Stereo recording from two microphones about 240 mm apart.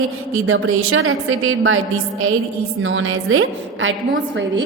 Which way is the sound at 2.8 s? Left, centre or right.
Right.